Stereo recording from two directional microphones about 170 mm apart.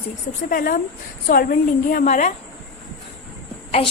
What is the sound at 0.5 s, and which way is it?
A woman's voice, 55° left (ahead or behind).